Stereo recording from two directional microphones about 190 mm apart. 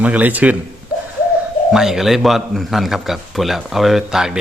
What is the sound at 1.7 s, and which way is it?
A man's voice, centre (ahead or behind).